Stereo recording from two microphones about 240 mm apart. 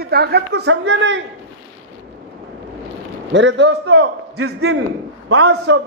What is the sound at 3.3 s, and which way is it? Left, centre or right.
A man's voice, right.